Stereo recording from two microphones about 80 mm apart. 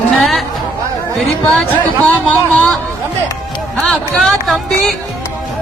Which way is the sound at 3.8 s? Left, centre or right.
Centre.